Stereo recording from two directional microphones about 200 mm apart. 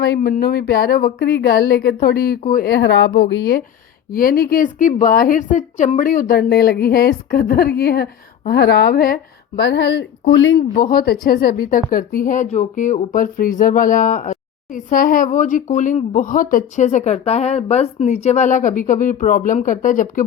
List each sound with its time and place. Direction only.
0.2 s a woman's voice: 50° left (ahead or behind)
4.1 s a woman's voice: 45° left (ahead or behind); by 10.6 s 65° left (ahead or behind)
10.8 s speech: 45° left (ahead or behind)